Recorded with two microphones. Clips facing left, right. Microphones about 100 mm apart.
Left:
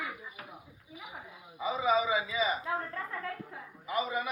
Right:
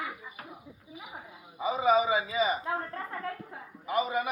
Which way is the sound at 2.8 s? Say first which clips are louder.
Right 1 dB; 35° right (ahead or behind).